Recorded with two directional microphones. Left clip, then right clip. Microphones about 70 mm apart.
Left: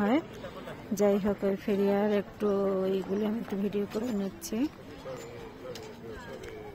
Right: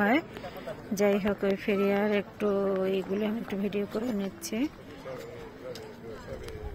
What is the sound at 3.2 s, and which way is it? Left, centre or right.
Speech, centre.